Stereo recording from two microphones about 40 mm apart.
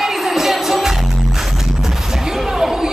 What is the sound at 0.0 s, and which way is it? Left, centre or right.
Music, centre.